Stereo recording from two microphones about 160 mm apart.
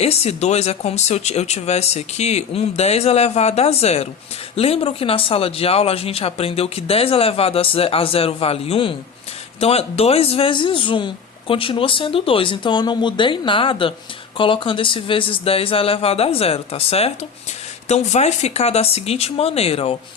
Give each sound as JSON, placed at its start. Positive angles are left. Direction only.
{"t": 0.0, "sound": "speech", "side_deg": 40}